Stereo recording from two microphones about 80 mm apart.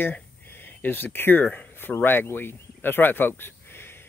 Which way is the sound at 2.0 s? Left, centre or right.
Left.